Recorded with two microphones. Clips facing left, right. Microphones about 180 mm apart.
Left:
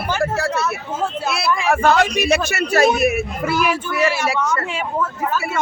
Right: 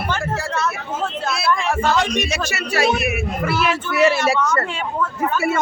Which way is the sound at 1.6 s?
60° left (ahead or behind).